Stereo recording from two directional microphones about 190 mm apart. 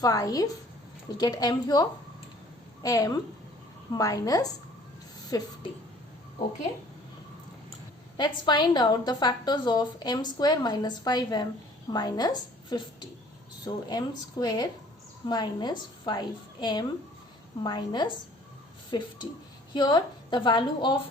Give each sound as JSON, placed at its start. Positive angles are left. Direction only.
{"t": 0.0, "sound": "a woman's voice", "side_deg": 20}
{"t": 8.1, "sound": "a woman's voice", "side_deg": 25}